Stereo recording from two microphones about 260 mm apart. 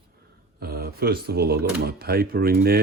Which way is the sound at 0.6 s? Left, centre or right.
Right.